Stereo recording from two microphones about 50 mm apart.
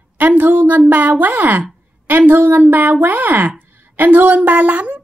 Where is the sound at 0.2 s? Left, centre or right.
Right.